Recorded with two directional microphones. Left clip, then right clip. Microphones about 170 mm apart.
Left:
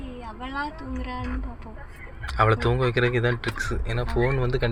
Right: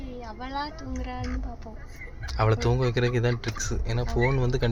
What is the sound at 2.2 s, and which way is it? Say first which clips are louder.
Speech: left 4 dB; 10° right (ahead or behind).